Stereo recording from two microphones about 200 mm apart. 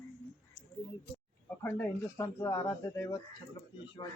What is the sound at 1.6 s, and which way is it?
Speech, 10° left (ahead or behind).